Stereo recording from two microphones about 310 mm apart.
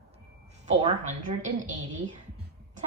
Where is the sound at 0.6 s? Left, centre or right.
Centre.